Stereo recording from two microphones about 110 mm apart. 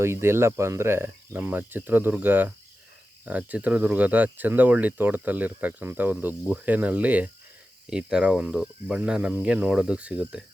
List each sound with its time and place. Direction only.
0.0 s speech: 25° right (ahead or behind)